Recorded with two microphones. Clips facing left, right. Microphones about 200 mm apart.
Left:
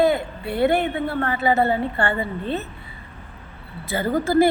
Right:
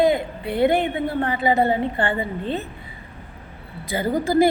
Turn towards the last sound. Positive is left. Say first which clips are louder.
# even
turn(degrees=-15)  # may be behind; listen again after turning